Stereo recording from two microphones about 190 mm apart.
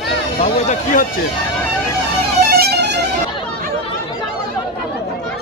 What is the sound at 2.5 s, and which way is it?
Music, 60° right (ahead or behind).